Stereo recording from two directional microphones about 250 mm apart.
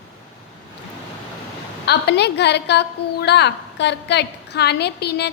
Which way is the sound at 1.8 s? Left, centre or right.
Left.